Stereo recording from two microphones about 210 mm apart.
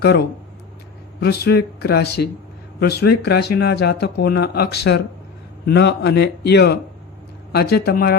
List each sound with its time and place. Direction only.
1.2 s speech: 50° left (ahead or behind)